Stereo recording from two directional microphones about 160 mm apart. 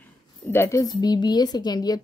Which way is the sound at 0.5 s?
15° left (ahead or behind).